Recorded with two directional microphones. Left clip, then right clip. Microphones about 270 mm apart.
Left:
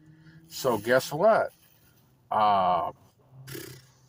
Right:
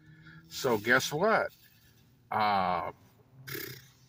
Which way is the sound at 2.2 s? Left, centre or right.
Left.